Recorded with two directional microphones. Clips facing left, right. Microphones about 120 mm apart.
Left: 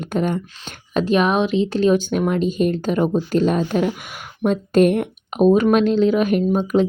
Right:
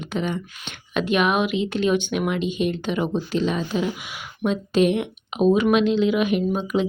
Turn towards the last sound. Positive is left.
turn(degrees=45)  # may be behind; listen again after turning